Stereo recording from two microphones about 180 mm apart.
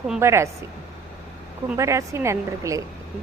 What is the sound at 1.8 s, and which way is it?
A woman's voice, 15° right (ahead or behind).